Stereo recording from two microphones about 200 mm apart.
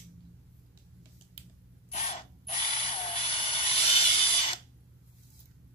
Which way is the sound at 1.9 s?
30° left (ahead or behind).